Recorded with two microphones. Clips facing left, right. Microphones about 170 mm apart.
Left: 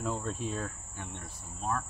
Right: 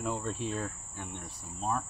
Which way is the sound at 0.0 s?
Centre (ahead or behind).